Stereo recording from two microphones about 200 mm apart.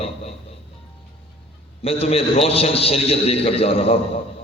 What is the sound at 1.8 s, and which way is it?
A man's voice, 30° left (ahead or behind).